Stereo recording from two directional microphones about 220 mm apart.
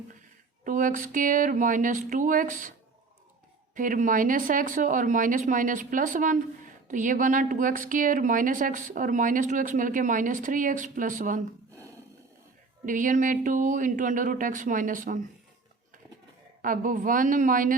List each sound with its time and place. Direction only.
0.6 s speech: 35° right (ahead or behind)
3.8 s speech: 35° right (ahead or behind)
12.8 s speech: 35° right (ahead or behind)
16.6 s speech: 40° right (ahead or behind)